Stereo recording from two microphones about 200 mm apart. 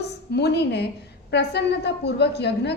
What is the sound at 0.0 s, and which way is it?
A woman's voice, 55° left (ahead or behind).